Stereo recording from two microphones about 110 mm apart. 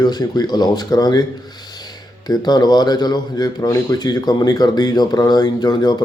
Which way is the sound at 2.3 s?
40° left (ahead or behind).